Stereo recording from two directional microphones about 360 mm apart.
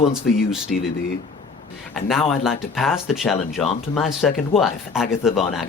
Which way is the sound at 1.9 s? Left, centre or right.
Centre.